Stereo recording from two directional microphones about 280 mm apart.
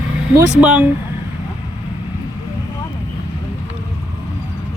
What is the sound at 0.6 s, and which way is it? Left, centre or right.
Speech, centre.